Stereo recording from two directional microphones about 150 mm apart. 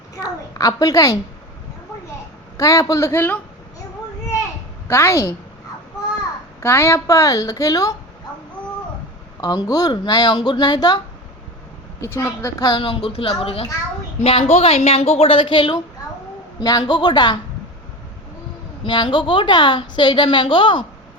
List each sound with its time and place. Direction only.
0.2 s speech: 25° left (ahead or behind)
2.6 s speech: 20° left (ahead or behind)
4.9 s speech: 20° left (ahead or behind)
6.6 s speech: 15° left (ahead or behind)
9.4 s a woman's voice: 25° left (ahead or behind)
18.9 s a woman's voice: 30° left (ahead or behind)